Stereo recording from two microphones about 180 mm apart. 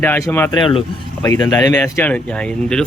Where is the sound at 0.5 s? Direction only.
30° left (ahead or behind).